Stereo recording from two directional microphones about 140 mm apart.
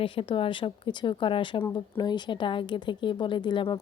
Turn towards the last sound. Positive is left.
turn(degrees=35)  # may be behind; listen again after turning